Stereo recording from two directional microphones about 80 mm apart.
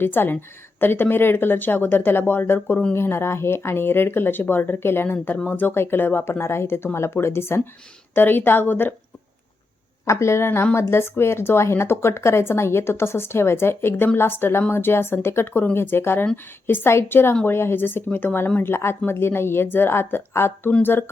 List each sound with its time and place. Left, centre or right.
0.0 s speech: left
10.1 s speech: left